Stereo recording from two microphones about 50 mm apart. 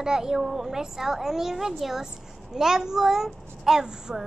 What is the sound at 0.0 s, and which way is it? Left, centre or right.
A child's voice, centre.